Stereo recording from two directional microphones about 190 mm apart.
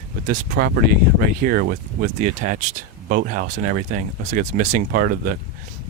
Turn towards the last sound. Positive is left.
turn(degrees=-45)  # may be behind; listen again after turning